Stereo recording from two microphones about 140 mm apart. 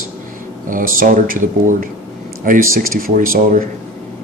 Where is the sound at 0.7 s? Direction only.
75° right (ahead or behind).